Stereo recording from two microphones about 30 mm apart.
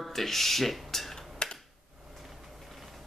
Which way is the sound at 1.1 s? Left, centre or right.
Left.